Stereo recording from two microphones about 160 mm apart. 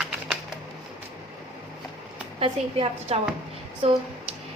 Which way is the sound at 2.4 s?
35° right (ahead or behind).